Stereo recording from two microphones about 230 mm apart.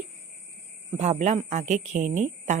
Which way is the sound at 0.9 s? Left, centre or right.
Right.